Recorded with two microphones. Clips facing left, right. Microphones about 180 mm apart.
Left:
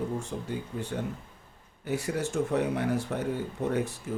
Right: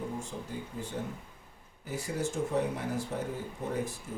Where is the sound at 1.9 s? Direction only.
70° left (ahead or behind).